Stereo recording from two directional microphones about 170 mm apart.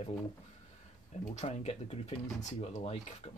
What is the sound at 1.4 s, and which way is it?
Speech, 35° left (ahead or behind).